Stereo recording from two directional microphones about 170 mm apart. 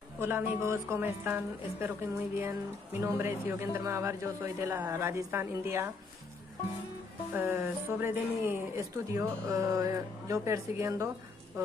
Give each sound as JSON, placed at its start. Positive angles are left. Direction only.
{"t": 0.2, "sound": "a woman's voice", "side_deg": -15}
{"t": 7.3, "sound": "a woman's voice", "side_deg": -10}